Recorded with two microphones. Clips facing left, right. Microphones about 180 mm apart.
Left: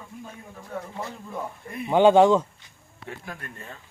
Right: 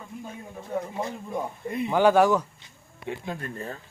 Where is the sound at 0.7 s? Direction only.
15° right (ahead or behind).